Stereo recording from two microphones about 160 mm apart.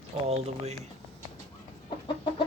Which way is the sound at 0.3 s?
40° right (ahead or behind).